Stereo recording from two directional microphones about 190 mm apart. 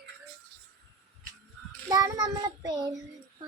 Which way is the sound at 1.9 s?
20° right (ahead or behind).